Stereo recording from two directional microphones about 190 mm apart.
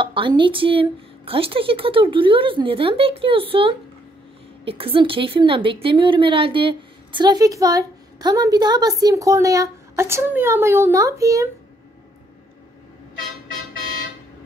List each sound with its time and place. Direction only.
0.0 s a woman's voice: 25° right (ahead or behind)